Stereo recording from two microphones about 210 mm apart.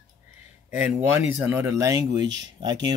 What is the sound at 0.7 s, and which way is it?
Speech, 10° right (ahead or behind).